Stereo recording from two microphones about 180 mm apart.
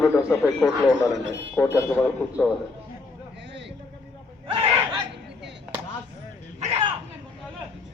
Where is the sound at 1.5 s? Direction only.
15° left (ahead or behind).